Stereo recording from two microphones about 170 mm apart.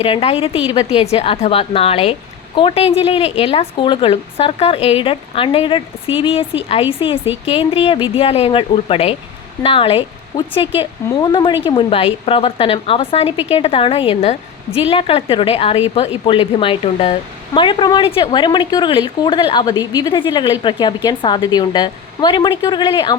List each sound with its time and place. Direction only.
0.0 s speech: 35° left (ahead or behind)